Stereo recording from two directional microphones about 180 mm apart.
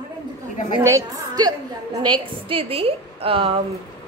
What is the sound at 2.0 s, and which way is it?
A woman's voice, 30° right (ahead or behind).